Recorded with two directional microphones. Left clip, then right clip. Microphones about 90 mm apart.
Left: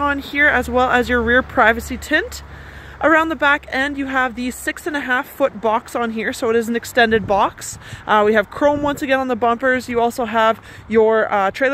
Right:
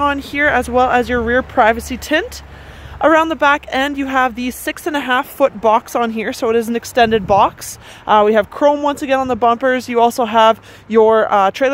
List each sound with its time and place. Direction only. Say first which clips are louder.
0.0 s speech: right 1 dB; 25° right (ahead or behind)
1.1 s speech: right 1 dB; centre (ahead or behind)
1.7 s speech: right 1 dB; 20° right (ahead or behind)
9.6 s speech: right 4 dB; 30° right (ahead or behind)